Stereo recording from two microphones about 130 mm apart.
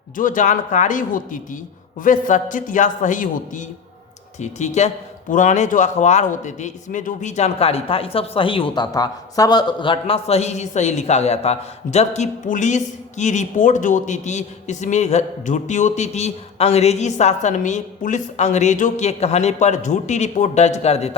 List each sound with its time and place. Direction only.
0.2 s a man's voice: 85° left
4.4 s a man's voice: 65° left (ahead or behind)
5.3 s a man's voice: 75° left (ahead or behind); by 21.2 s 55° left (ahead or behind)